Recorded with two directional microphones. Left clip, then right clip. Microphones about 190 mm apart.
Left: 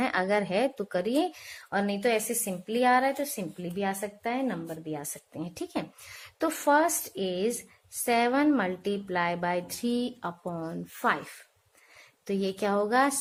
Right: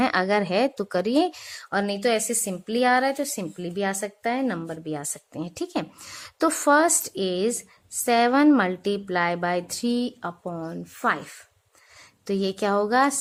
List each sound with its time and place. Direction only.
0.0 s a woman's voice: 25° right (ahead or behind)